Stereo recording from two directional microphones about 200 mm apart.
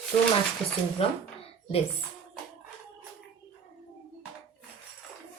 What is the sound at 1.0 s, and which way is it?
Speech, 30° left (ahead or behind).